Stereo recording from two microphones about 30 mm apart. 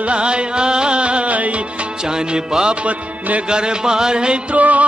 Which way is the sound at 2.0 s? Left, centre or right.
Right.